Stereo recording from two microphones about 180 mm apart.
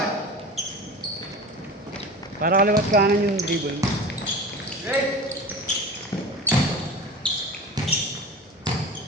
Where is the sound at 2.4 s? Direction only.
55° right (ahead or behind).